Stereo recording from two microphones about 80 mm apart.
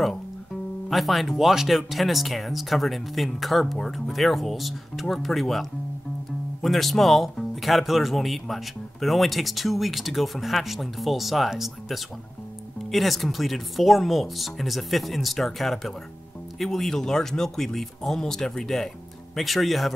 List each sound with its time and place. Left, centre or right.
0.8 s speech: centre